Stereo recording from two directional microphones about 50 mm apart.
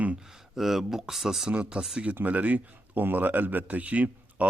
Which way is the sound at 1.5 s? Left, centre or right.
Right.